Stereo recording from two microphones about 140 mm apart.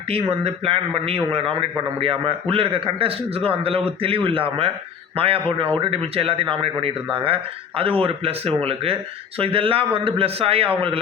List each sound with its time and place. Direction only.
0.1 s a man's voice: 45° right (ahead or behind)